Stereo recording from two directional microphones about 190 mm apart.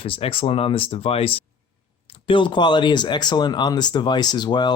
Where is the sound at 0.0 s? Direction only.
30° left (ahead or behind).